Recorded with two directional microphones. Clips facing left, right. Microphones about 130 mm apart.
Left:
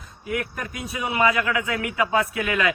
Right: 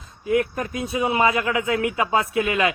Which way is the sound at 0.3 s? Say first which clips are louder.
Right 7 dB; 25° right (ahead or behind).